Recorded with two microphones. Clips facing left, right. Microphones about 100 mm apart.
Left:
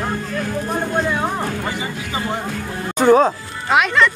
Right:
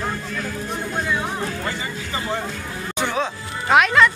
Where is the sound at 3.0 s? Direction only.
40° left (ahead or behind).